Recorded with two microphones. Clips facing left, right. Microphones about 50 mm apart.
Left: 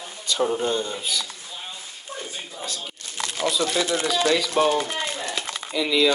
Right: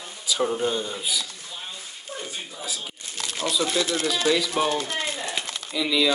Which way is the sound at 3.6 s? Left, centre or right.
Centre.